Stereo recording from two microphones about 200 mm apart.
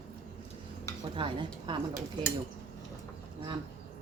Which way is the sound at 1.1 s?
25° right (ahead or behind).